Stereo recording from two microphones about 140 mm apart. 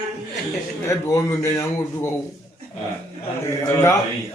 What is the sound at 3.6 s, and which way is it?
Speech, 20° left (ahead or behind).